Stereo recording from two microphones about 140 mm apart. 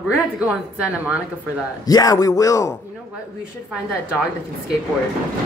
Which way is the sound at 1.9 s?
25° left (ahead or behind).